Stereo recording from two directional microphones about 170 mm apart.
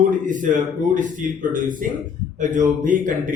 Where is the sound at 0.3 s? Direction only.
50° right (ahead or behind).